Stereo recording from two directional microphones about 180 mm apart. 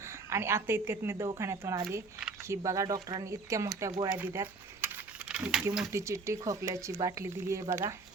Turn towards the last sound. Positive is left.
turn(degrees=-15)  # may be behind; listen again after turning